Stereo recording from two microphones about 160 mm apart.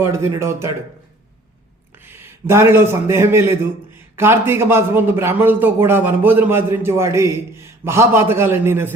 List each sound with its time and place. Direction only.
0.0 s a man's voice: 15° right (ahead or behind)
2.0 s a man's voice: 15° right (ahead or behind)